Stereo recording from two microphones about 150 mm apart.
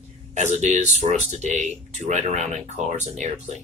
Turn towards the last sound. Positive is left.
turn(degrees=-50)  # may be behind; listen again after turning